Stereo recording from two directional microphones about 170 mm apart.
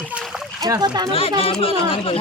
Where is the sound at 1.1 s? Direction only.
35° left (ahead or behind).